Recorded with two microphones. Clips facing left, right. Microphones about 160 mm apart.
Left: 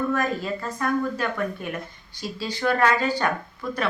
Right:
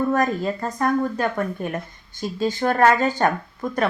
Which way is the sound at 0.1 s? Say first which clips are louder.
Right 4 dB; 40° right (ahead or behind).